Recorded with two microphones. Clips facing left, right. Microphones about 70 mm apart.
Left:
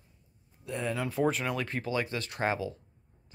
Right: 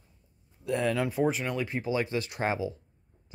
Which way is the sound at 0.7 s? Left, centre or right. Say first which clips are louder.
Right 6 dB; right.